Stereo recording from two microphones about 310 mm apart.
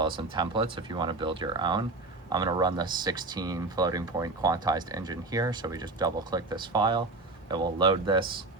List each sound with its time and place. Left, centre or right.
0.0 s speech: centre